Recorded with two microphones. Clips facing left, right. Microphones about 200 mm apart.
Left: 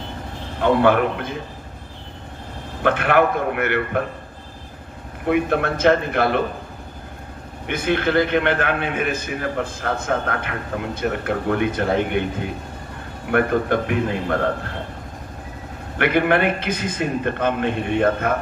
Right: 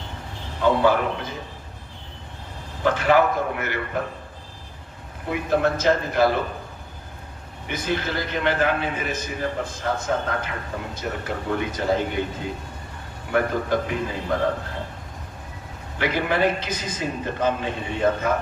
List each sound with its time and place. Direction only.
0.6 s a man's voice: 60° left (ahead or behind)
2.8 s a man's voice: 60° left (ahead or behind)
5.3 s a man's voice: 60° left (ahead or behind)
7.7 s a man's voice: 60° left (ahead or behind)
16.0 s a man's voice: 60° left (ahead or behind)